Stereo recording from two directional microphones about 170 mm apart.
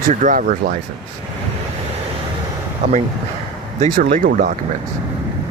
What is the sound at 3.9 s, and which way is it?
Speech, 60° right (ahead or behind).